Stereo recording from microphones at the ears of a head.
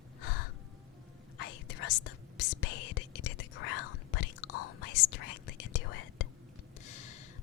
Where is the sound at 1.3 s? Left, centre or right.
Left.